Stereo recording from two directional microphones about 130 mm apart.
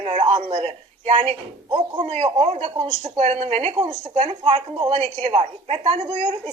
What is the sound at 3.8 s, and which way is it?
Speech, 25° right (ahead or behind).